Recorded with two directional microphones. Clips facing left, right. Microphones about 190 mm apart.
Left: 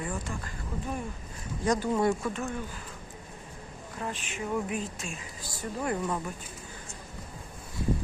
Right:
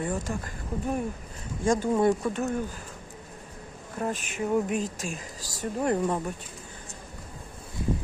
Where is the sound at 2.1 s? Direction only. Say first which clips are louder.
Right 4 dB; 40° right (ahead or behind).